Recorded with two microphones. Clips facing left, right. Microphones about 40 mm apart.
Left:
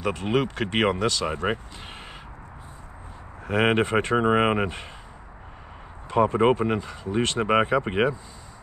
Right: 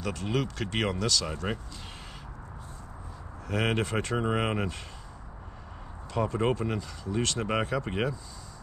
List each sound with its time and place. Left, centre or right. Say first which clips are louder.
0.0 s speech: left 6 dB; left
3.4 s speech: left 7 dB; left
6.0 s speech: left 8 dB; left